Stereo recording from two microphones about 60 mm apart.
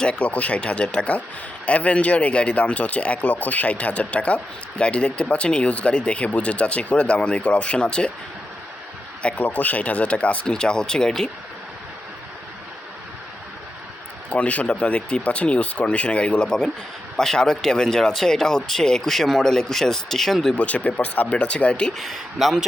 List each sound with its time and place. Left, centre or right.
0.0 s speech: centre
9.4 s speech: left; by 11.3 s centre
14.3 s speech: left
20.6 s speech: left
21.9 s speech: centre